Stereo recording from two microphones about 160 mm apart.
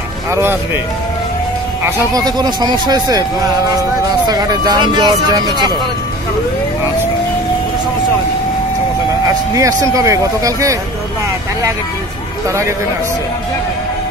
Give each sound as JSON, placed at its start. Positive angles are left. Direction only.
{"t": 0.3, "sound": "speech", "side_deg": -15}
{"t": 2.1, "sound": "speech", "side_deg": -25}
{"t": 9.6, "sound": "speech", "side_deg": -20}
{"t": 12.4, "sound": "speech", "side_deg": -20}